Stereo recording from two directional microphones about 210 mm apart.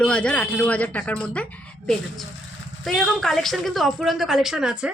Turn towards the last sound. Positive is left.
turn(degrees=-5)  # may be behind; listen again after turning